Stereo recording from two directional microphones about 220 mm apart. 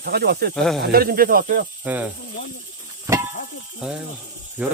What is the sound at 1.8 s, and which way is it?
Speech, 5° right (ahead or behind).